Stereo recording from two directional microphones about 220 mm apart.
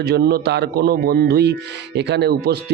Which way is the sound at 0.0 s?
50° right (ahead or behind).